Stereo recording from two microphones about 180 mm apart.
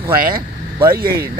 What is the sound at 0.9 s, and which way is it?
Speech, 60° right (ahead or behind).